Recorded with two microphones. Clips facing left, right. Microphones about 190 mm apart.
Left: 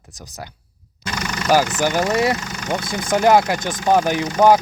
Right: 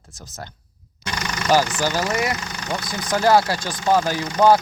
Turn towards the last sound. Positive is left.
turn(degrees=15)  # may be behind; listen again after turning